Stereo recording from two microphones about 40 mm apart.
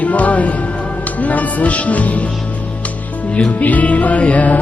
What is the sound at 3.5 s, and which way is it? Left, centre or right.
Music, left.